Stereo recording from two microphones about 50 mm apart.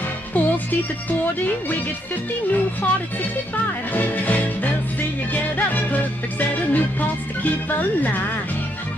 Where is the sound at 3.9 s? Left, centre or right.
Left.